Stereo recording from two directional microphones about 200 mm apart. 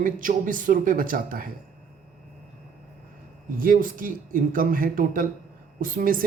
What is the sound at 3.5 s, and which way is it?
Speech, 45° right (ahead or behind).